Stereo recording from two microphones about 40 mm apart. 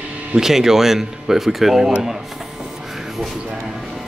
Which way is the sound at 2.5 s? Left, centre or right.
Centre.